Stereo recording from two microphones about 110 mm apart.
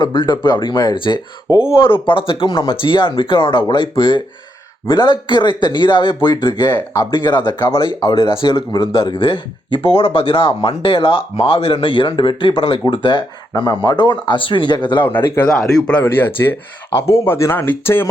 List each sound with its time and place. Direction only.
0.0 s speech: 45° left (ahead or behind)
1.5 s speech: 10° right (ahead or behind)
1.7 s speech: 50° left (ahead or behind)
15.4 s speech: 5° left (ahead or behind); by 18.1 s 20° left (ahead or behind)